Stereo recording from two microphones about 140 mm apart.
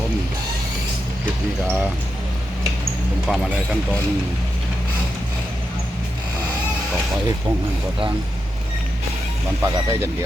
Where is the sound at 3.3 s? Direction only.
5° right (ahead or behind).